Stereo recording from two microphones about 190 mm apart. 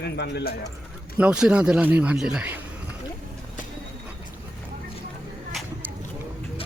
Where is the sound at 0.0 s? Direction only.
60° left (ahead or behind).